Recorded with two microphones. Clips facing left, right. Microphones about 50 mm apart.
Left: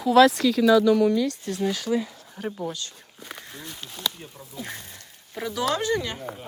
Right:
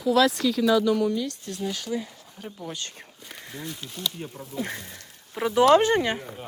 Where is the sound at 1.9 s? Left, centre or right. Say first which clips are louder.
Left 5 dB; left.